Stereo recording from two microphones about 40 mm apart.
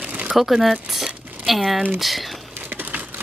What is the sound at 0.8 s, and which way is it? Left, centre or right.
Crumpling, centre.